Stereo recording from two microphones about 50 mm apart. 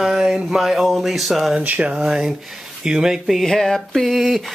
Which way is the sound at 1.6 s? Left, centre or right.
Right.